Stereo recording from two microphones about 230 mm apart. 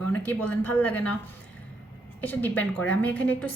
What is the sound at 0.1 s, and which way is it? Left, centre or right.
A woman's voice, centre.